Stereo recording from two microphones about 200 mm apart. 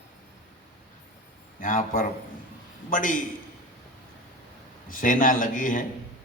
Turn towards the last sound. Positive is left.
turn(degrees=40)  # may be behind; listen again after turning